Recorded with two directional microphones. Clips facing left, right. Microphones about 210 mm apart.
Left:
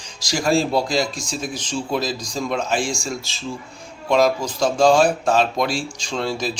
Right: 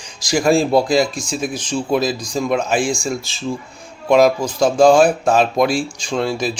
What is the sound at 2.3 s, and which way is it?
Speech, 10° right (ahead or behind).